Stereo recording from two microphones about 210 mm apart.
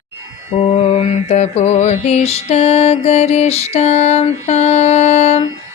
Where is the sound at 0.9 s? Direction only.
30° left (ahead or behind).